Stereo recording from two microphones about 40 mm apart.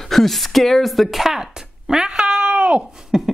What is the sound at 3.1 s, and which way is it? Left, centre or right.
Beatboxing, centre.